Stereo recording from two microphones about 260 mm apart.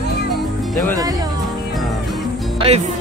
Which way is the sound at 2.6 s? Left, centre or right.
Right.